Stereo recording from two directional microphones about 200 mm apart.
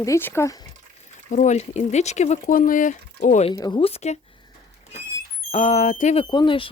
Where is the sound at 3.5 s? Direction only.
20° left (ahead or behind).